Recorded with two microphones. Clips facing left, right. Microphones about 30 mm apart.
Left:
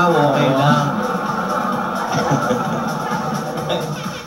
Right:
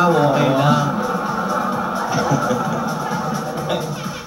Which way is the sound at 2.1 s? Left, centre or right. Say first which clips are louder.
Left 1 dB; left.